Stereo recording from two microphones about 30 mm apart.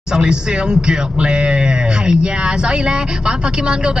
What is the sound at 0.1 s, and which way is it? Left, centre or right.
Speech, right.